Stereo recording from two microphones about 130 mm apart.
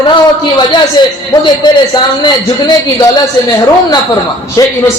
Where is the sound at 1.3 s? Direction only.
35° left (ahead or behind).